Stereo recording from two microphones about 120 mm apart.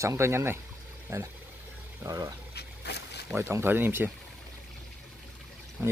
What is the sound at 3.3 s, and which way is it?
Speech, 20° right (ahead or behind).